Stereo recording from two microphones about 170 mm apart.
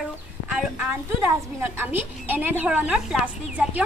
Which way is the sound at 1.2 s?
10° right (ahead or behind).